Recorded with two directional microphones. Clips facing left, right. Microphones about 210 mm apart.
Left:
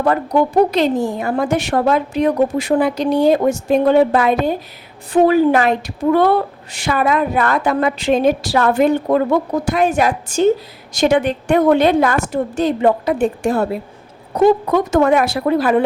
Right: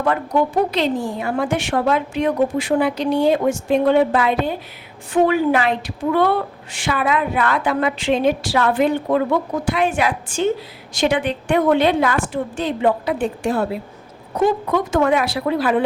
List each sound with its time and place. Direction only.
0.0 s a woman's voice: 40° left (ahead or behind)